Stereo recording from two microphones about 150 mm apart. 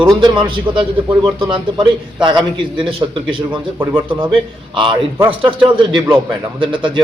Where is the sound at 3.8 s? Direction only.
15° right (ahead or behind).